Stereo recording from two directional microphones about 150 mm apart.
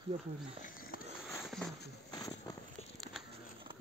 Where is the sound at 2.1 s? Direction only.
25° left (ahead or behind).